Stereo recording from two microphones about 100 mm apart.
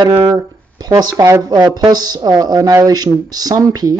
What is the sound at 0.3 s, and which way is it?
Speech, 40° right (ahead or behind).